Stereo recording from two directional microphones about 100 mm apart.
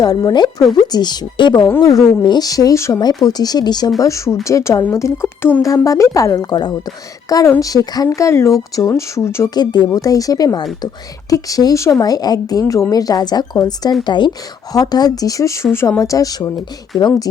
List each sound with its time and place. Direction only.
0.0 s a woman's voice: 40° left (ahead or behind)
4.0 s a woman's voice: 30° left (ahead or behind)
5.6 s a woman's voice: 35° left (ahead or behind)
9.6 s a woman's voice: 45° left (ahead or behind)